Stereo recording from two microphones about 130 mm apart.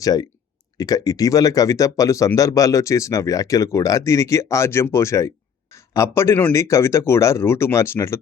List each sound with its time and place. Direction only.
0.0 s speech: 30° left (ahead or behind)